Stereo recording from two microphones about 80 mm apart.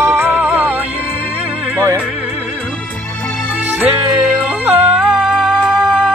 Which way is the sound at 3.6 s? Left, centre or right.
Centre.